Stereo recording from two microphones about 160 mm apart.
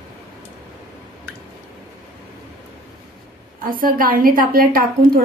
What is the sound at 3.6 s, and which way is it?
A woman's voice, 60° right (ahead or behind).